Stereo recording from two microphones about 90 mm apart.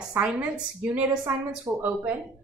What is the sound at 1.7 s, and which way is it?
Speech, 30° right (ahead or behind).